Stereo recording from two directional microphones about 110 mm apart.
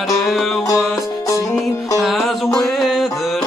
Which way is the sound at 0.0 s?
Centre (ahead or behind).